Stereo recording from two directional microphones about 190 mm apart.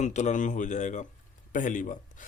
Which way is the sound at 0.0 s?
40° left (ahead or behind).